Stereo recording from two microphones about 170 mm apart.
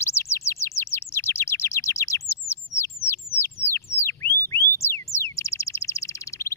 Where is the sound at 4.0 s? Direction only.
15° left (ahead or behind).